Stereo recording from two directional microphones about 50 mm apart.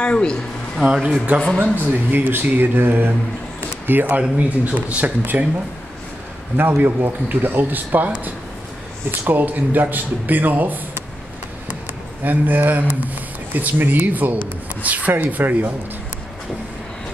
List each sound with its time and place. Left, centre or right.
0.0 s speech: centre
1.6 s speech: right
4.1 s speech: right
6.5 s speech: right
12.2 s speech: right